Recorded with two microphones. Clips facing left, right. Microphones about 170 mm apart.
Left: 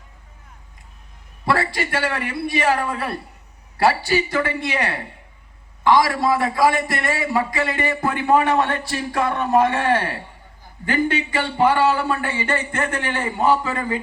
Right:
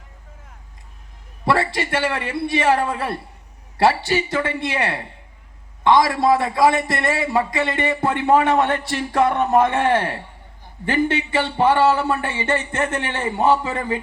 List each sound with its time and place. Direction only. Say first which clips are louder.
1.5 s a man's voice: right 2 dB; 25° right (ahead or behind)